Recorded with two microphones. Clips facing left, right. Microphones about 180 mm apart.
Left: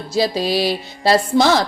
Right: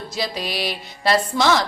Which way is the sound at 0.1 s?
35° left (ahead or behind).